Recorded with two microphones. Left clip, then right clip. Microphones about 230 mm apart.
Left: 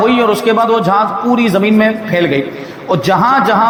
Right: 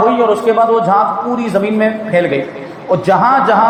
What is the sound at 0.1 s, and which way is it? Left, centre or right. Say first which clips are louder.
A man's voice: even; left.